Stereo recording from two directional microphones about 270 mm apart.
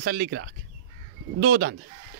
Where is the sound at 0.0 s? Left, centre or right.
Right.